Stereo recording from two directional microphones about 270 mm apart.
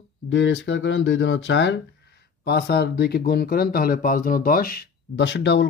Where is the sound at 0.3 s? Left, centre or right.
Left.